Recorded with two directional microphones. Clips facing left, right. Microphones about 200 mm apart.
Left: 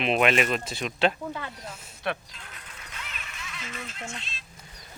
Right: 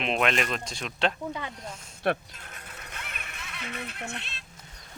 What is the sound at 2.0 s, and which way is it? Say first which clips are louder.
Music: right 4 dB; 50° right (ahead or behind).